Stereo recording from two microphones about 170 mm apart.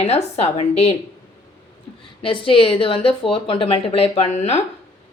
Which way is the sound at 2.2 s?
30° left (ahead or behind).